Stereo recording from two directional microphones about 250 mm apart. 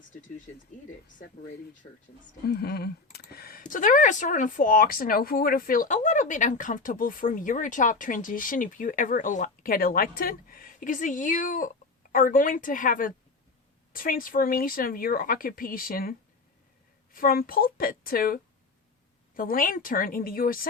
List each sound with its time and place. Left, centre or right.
0.1 s speech: left
2.5 s speech: left